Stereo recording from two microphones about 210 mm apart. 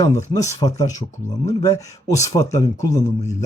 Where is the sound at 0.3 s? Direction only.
15° left (ahead or behind).